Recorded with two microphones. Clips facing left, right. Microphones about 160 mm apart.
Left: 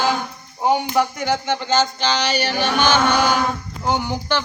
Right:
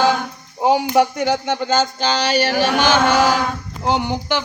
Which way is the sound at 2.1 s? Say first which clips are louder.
Right 3 dB; 45° right (ahead or behind).